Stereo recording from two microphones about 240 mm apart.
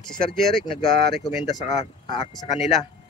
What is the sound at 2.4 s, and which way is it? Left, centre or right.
Speech, left.